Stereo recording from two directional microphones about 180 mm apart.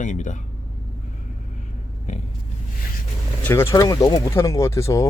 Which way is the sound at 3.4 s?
15° left (ahead or behind).